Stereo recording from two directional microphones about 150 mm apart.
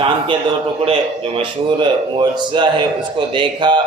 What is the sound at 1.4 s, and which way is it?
Speech, 30° right (ahead or behind).